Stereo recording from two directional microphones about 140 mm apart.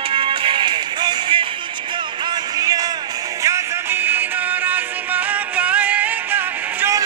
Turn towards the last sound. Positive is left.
turn(degrees=-15)  # may be behind; listen again after turning